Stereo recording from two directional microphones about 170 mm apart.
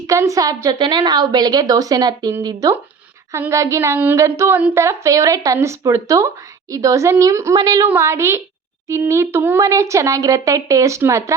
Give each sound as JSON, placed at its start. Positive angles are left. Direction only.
{"t": 0.1, "sound": "a woman's voice", "side_deg": -20}